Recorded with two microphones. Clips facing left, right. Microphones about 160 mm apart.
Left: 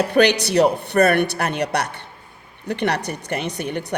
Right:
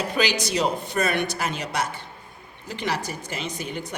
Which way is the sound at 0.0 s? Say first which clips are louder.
Left 8 dB; 65° left (ahead or behind).